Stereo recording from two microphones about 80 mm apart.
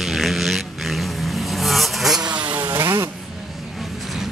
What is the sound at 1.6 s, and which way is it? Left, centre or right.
Vehicle, centre.